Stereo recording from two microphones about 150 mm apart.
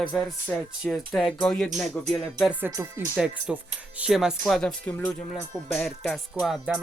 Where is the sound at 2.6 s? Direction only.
20° right (ahead or behind).